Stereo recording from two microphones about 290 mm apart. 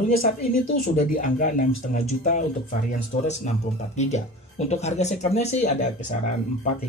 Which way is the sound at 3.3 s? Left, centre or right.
Left.